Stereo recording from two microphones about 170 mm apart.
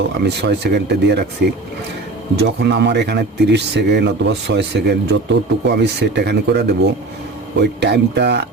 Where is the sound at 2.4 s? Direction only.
85° right.